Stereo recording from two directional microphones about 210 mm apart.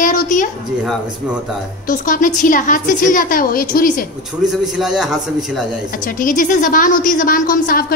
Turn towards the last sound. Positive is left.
turn(degrees=45)  # may be behind; listen again after turning